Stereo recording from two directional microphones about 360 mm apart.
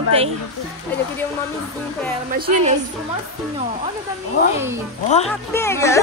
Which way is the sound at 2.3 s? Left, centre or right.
Right.